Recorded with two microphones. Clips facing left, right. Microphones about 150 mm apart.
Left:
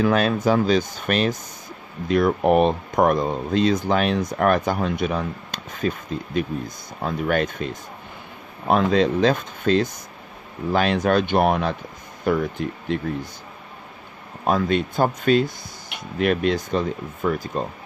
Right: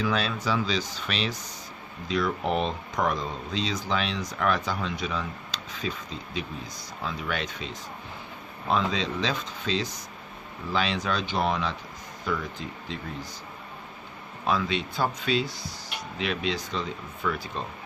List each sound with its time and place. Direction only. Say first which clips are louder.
0.0 s speech: left 9 dB; 55° left (ahead or behind)
14.4 s speech: left 7 dB; 50° left (ahead or behind)